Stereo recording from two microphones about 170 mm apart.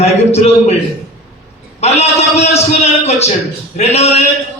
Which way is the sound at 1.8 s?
40° left (ahead or behind).